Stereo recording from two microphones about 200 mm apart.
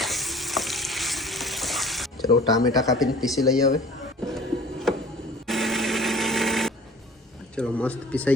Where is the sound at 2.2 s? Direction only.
20° left (ahead or behind).